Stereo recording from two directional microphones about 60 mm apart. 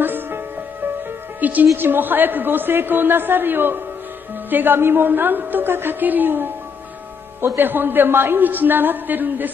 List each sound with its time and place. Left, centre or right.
0.0 s music: right
1.4 s a man's voice: right